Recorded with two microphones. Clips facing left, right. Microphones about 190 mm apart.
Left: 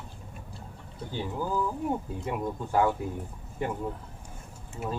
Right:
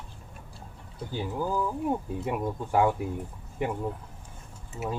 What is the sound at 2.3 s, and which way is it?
Speech, 15° right (ahead or behind).